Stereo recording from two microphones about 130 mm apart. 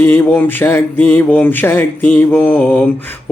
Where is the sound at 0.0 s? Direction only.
15° left (ahead or behind).